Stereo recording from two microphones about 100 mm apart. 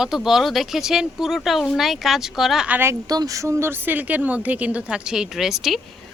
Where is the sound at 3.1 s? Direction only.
35° right (ahead or behind).